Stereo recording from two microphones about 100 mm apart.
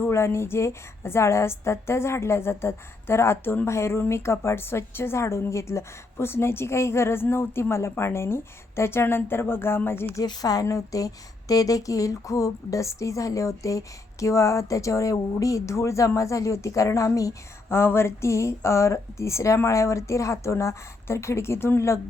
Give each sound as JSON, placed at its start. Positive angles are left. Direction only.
{"t": 0.0, "sound": "a woman's voice", "side_deg": 25}
{"t": 10.2, "sound": "a woman's voice", "side_deg": 40}